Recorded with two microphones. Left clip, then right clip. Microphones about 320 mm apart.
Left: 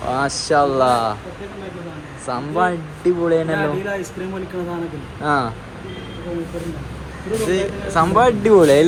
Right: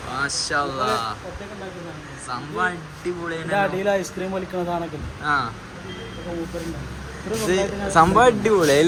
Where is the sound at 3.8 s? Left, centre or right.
Right.